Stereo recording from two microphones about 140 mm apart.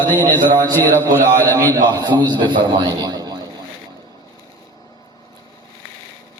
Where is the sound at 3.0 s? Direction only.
30° right (ahead or behind).